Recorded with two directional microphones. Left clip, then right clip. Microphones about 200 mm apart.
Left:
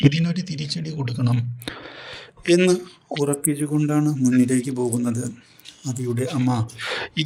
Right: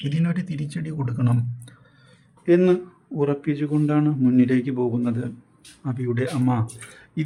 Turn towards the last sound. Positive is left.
turn(degrees=45)  # may be behind; listen again after turning